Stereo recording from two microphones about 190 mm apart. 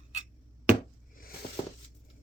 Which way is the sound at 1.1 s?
50° left (ahead or behind).